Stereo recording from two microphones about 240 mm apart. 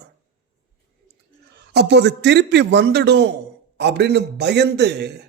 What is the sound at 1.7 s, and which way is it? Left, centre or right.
A man's voice, right.